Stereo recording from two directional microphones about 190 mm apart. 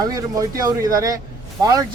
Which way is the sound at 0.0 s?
20° right (ahead or behind).